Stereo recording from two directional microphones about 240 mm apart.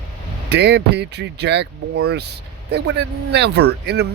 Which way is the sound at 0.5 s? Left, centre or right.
Right.